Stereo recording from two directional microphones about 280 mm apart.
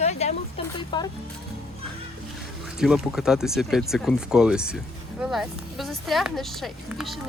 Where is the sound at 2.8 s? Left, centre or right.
Centre.